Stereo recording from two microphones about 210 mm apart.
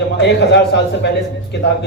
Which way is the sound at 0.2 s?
55° left (ahead or behind).